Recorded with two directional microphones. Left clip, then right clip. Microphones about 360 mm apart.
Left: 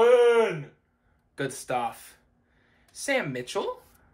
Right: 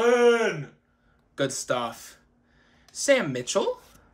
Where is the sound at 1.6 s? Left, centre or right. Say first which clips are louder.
Right 1 dB; centre.